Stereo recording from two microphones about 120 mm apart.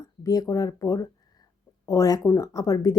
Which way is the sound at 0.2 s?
30° left (ahead or behind).